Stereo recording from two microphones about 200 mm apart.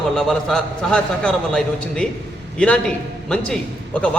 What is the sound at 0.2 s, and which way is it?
A man's voice, 5° left (ahead or behind).